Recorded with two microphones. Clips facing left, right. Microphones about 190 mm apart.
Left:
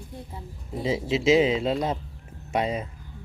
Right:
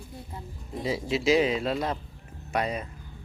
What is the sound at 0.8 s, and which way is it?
Speech, 25° left (ahead or behind).